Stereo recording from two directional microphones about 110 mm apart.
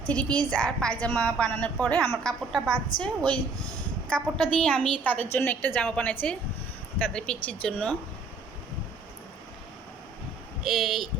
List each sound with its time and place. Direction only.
0.0 s a woman's voice: 10° left (ahead or behind)
10.6 s speech: centre (ahead or behind)